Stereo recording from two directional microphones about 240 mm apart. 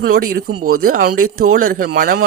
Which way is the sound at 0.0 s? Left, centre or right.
Right.